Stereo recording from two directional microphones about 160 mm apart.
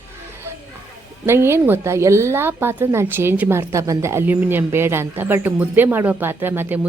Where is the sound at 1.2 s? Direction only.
15° right (ahead or behind).